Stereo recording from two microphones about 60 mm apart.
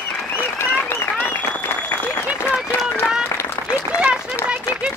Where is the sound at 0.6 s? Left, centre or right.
Left.